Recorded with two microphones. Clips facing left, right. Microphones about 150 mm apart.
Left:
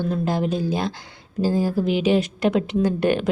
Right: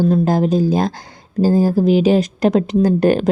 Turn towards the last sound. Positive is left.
turn(degrees=-40)  # may be behind; listen again after turning